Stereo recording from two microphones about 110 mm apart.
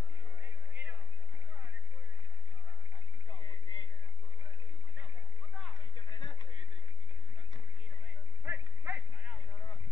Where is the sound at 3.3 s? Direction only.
45° left (ahead or behind).